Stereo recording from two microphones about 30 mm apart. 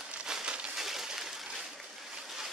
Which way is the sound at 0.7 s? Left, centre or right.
Centre.